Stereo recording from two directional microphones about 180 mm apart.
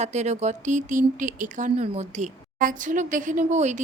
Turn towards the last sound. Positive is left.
turn(degrees=-40)  # may be behind; listen again after turning